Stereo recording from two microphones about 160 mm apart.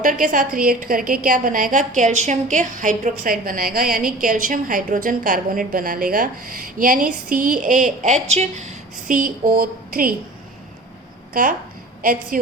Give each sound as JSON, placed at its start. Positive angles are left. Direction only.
{"t": 0.0, "sound": "a woman's voice", "side_deg": -55}
{"t": 12.3, "sound": "a woman's voice", "side_deg": -55}